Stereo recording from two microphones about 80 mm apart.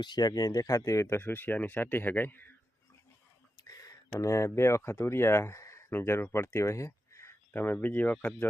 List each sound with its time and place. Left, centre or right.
0.0 s speech: left
3.6 s speech: left; by 8.4 s centre